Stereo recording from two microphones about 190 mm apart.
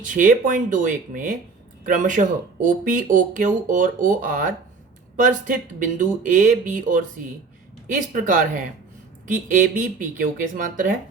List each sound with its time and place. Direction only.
0.0 s speech: 45° right (ahead or behind)
8.1 s speech: 45° right (ahead or behind)